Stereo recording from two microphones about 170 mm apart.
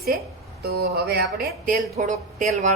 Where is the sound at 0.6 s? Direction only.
70° right (ahead or behind).